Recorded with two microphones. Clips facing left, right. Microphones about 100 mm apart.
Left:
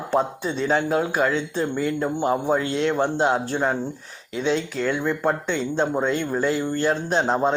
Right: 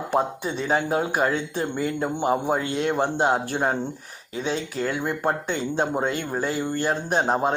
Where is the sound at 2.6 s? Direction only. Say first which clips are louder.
Left 2 dB; 60° left (ahead or behind).